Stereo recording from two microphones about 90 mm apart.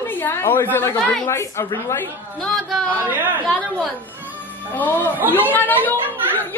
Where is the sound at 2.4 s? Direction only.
5° left (ahead or behind).